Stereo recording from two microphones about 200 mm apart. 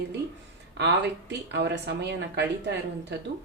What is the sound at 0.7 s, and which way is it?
Speech, 60° right (ahead or behind).